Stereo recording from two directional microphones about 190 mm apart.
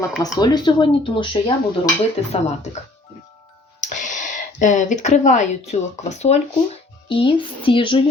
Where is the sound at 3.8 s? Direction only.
40° left (ahead or behind).